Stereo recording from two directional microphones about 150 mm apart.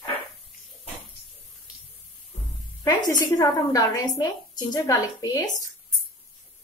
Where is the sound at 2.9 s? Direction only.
25° left (ahead or behind).